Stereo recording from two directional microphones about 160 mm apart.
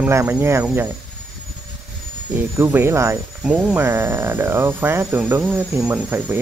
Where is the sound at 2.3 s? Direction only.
15° right (ahead or behind).